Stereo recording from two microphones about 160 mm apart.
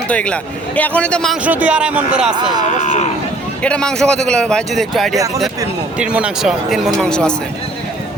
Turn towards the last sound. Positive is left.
turn(degrees=5)  # may be behind; listen again after turning